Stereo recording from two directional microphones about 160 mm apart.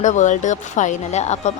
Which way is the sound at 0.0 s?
50° left (ahead or behind).